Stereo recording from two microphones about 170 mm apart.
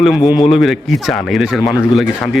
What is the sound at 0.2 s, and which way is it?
Speech, 25° left (ahead or behind).